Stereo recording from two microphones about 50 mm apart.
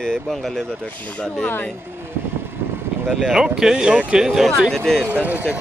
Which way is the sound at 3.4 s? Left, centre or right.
Centre.